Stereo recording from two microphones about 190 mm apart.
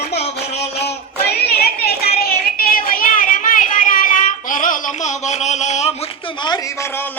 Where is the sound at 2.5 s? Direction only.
50° left (ahead or behind).